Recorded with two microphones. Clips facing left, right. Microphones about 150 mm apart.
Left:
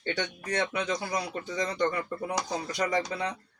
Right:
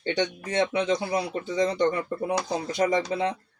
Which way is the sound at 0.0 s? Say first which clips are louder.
Right 6 dB; 25° right (ahead or behind).